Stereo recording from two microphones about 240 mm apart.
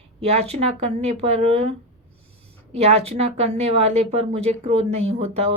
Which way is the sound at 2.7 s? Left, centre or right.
Right.